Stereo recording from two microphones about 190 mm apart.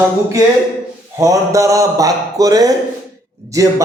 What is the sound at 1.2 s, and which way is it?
A man's voice, 15° right (ahead or behind).